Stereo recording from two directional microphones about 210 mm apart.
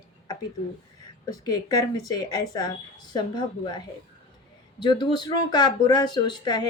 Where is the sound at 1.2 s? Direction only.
20° left (ahead or behind).